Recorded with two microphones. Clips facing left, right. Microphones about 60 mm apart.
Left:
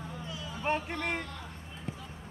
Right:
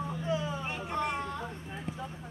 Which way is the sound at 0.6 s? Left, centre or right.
Left.